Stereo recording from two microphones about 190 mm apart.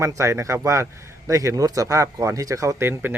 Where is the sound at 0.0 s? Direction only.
15° right (ahead or behind).